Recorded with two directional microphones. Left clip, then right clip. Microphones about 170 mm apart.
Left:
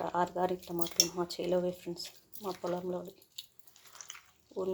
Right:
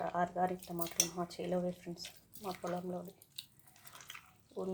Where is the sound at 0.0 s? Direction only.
30° left (ahead or behind).